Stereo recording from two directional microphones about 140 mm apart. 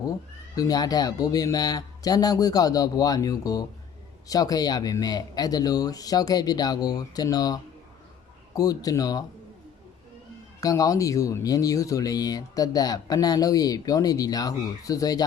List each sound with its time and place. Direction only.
0.5 s speech: 25° left (ahead or behind)
10.6 s speech: 25° left (ahead or behind)